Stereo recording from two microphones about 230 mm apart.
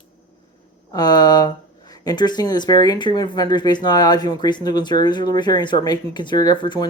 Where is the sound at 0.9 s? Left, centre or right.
Centre.